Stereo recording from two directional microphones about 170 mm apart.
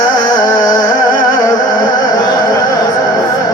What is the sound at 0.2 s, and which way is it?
Music, 20° left (ahead or behind).